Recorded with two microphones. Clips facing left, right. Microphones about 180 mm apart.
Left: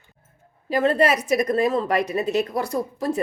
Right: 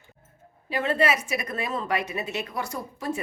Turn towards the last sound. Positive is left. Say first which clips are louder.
# left 7 dB
turn(degrees=35)  # may be behind; listen again after turning